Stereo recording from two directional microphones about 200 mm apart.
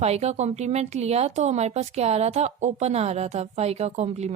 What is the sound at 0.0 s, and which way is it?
Speech, 30° right (ahead or behind).